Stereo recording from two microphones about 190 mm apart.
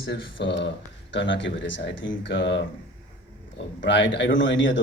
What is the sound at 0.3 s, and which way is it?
Speech, 70° left (ahead or behind).